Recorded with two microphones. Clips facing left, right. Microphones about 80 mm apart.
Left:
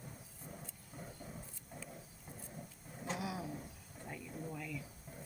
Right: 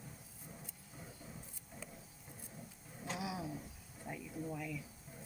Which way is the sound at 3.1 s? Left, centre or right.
Centre.